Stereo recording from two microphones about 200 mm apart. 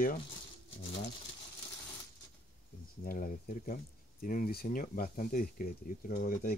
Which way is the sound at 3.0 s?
45° left (ahead or behind).